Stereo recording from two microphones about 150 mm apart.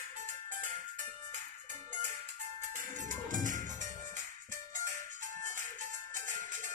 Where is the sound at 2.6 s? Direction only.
60° right (ahead or behind).